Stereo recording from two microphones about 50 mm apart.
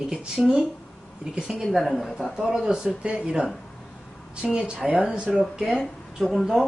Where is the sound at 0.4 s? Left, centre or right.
Centre.